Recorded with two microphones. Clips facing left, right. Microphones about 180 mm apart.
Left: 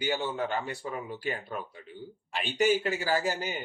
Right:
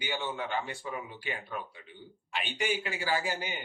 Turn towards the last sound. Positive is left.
turn(degrees=40)  # may be behind; listen again after turning